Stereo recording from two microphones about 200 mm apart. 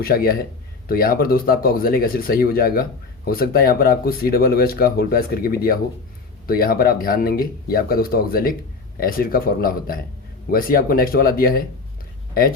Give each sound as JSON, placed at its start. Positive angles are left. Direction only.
{"t": 0.0, "sound": "speech", "side_deg": 50}